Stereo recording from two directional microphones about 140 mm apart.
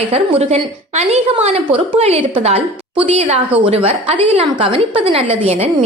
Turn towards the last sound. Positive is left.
turn(degrees=-45)  # may be behind; listen again after turning